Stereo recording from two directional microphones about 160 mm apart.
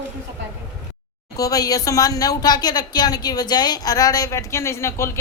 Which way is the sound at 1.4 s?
20° left (ahead or behind).